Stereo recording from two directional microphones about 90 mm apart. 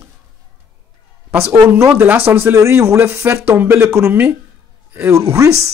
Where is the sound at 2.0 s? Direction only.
20° right (ahead or behind).